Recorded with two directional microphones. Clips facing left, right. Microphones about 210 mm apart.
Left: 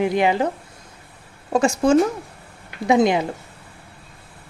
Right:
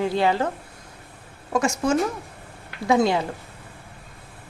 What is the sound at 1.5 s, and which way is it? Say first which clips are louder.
Speech: left 5 dB; 30° left (ahead or behind).